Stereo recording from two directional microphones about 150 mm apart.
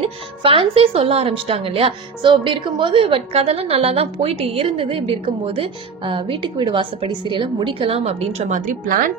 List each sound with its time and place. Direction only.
0.4 s speech: 40° right (ahead or behind); by 9.1 s 65° right (ahead or behind)